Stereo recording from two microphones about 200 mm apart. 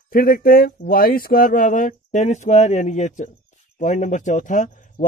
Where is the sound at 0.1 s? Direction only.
45° left (ahead or behind).